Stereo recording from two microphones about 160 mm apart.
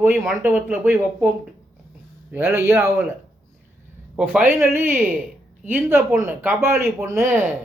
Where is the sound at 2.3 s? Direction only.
15° right (ahead or behind).